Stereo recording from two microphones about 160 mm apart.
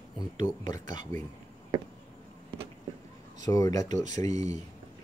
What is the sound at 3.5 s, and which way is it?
Speech, 20° left (ahead or behind).